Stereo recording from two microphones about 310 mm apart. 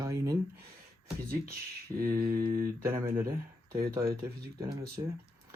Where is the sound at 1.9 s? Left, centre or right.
Centre.